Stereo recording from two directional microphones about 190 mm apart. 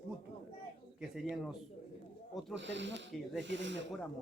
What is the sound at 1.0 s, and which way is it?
Speech, 5° right (ahead or behind).